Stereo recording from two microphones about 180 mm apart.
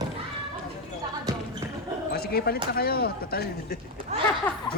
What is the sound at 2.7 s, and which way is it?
Speech, 60° left (ahead or behind).